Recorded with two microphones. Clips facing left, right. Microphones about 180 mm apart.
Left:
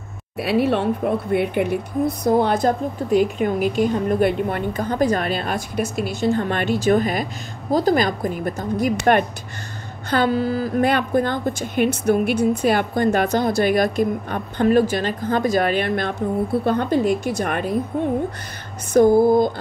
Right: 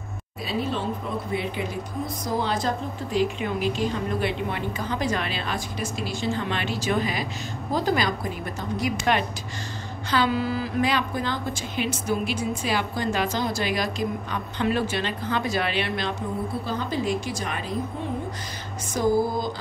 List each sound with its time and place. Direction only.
0.4 s a woman's voice: 70° left (ahead or behind)